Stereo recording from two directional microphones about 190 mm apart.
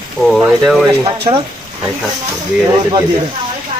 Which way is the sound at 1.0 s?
25° right (ahead or behind).